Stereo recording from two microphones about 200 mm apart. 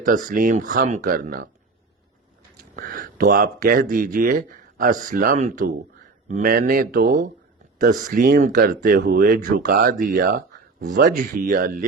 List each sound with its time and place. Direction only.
0.0 s speech: 40° right (ahead or behind)
2.7 s speech: 40° right (ahead or behind)